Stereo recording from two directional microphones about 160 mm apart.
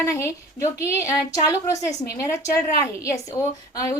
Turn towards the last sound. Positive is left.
turn(degrees=20)  # may be behind; listen again after turning